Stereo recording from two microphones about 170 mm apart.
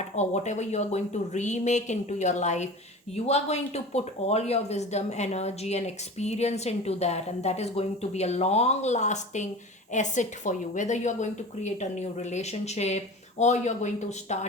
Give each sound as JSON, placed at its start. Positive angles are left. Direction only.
{"t": 0.2, "sound": "a woman's voice", "side_deg": 40}